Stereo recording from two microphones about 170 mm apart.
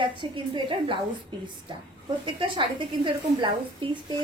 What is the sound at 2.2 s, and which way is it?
A woman's voice, 30° right (ahead or behind).